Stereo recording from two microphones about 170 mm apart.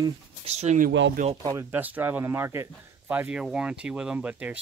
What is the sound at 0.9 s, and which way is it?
Speech, 90° right.